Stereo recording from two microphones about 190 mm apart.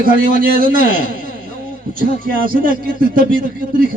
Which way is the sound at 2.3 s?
50° right (ahead or behind).